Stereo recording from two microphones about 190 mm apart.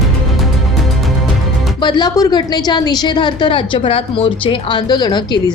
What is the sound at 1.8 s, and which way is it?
A woman's voice, 25° left (ahead or behind).